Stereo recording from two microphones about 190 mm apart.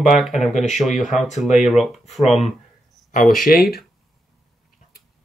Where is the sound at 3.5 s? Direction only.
50° left (ahead or behind).